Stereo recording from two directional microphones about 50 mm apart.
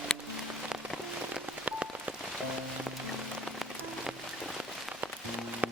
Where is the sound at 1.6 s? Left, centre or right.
Right.